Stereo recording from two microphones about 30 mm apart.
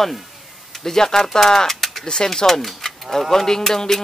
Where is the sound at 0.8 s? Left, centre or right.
Centre.